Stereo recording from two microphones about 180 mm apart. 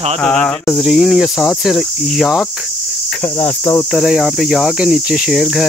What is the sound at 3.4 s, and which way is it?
Cricket, 20° left (ahead or behind).